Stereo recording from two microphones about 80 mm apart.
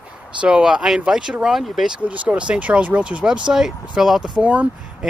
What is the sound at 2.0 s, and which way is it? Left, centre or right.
Speech, centre.